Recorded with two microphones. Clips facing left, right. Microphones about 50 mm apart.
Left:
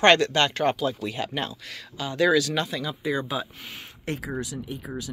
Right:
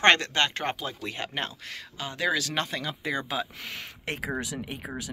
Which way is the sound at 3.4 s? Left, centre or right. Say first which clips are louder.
Right 2 dB; right.